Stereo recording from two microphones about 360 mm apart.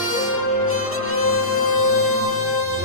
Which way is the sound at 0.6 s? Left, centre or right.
Left.